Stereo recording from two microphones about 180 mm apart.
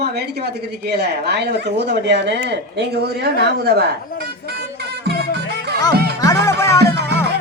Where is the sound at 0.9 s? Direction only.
65° right (ahead or behind).